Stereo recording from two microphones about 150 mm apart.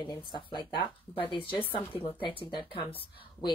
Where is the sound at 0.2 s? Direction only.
30° left (ahead or behind).